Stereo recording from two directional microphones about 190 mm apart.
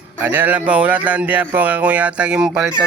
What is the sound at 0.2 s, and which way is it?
Speech, 10° right (ahead or behind).